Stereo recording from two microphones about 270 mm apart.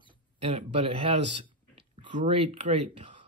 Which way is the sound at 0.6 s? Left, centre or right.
Centre.